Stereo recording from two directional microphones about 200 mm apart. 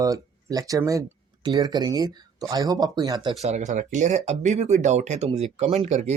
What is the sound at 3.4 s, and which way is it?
Speech, 35° right (ahead or behind).